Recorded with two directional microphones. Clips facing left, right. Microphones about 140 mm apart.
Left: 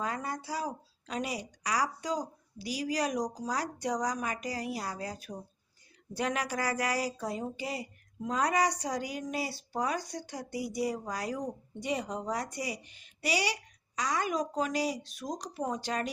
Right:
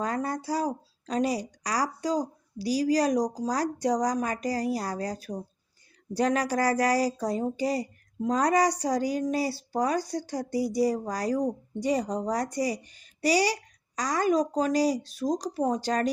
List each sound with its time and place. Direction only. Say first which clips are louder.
0.0 s speech: right 6 dB; 40° right (ahead or behind)